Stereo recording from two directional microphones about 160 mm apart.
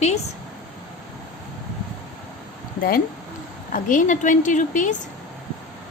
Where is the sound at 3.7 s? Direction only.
55° left (ahead or behind).